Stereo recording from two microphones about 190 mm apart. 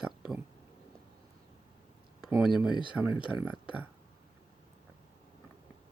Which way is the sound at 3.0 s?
5° right (ahead or behind).